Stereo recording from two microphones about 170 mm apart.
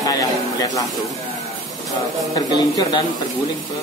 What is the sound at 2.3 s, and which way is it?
Speech, 25° left (ahead or behind).